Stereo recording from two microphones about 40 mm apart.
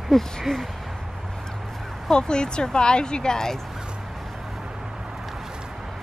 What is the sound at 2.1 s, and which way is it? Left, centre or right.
Speech, left.